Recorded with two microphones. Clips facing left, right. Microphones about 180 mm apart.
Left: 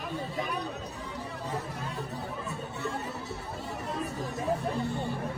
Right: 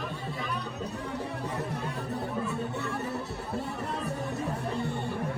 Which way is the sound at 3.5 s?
60° right (ahead or behind).